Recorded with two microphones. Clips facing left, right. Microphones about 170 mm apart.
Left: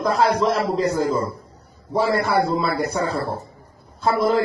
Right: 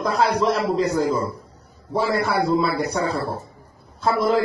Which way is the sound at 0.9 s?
50° left (ahead or behind).